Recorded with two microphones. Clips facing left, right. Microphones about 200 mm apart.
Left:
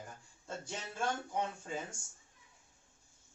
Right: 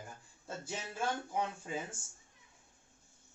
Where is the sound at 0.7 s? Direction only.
5° right (ahead or behind).